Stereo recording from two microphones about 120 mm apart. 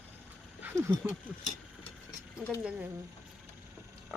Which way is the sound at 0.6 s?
20° right (ahead or behind).